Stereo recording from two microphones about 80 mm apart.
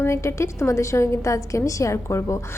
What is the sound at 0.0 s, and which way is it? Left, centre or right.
A woman's voice, left.